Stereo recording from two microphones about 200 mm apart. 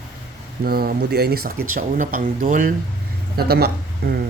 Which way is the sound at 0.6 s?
50° right (ahead or behind).